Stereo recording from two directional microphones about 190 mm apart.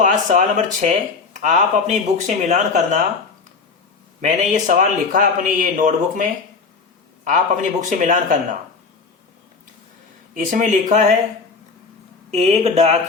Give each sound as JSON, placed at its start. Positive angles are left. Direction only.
{"t": 0.0, "sound": "speech", "side_deg": -40}
{"t": 4.2, "sound": "speech", "side_deg": -40}
{"t": 7.3, "sound": "speech", "side_deg": -40}
{"t": 10.3, "sound": "speech", "side_deg": -45}
{"t": 12.3, "sound": "speech", "side_deg": -35}